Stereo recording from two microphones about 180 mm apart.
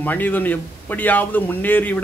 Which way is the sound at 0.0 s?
10° left (ahead or behind).